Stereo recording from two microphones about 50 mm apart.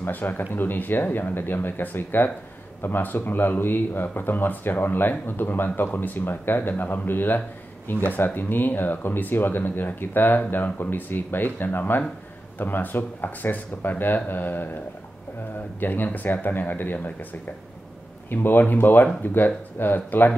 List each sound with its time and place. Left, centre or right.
0.0 s speech: left
15.8 s speech: left
18.3 s speech: left